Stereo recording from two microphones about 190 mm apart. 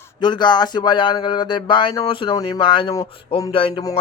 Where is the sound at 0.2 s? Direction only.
20° left (ahead or behind).